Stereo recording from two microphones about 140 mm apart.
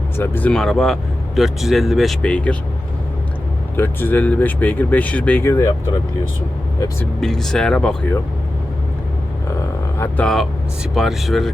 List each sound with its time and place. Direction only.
0.2 s speech: 10° left (ahead or behind)
3.8 s speech: 15° left (ahead or behind)
7.0 s speech: 5° left (ahead or behind)
10.2 s speech: centre (ahead or behind)